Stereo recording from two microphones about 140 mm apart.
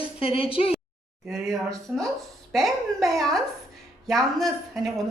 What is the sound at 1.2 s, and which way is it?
A woman's voice, centre (ahead or behind).